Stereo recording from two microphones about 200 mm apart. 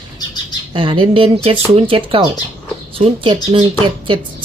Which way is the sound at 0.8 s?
25° right (ahead or behind).